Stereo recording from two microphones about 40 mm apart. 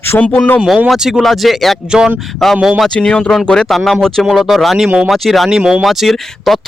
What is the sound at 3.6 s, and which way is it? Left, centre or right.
Speech, centre.